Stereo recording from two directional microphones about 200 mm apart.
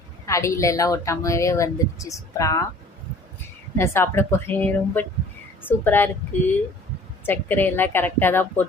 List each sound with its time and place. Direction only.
0.3 s a woman's voice: 15° left (ahead or behind)
3.8 s a woman's voice: 10° left (ahead or behind)